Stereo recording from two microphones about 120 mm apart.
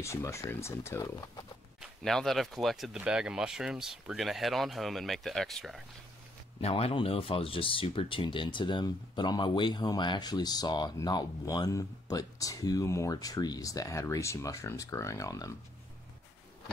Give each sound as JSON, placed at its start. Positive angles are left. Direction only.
{"t": 0.0, "sound": "speech", "side_deg": 25}
{"t": 2.0, "sound": "speech", "side_deg": 5}
{"t": 6.6, "sound": "speech", "side_deg": 55}